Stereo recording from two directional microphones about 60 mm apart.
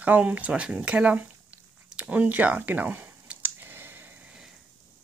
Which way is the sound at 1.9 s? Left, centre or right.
Right.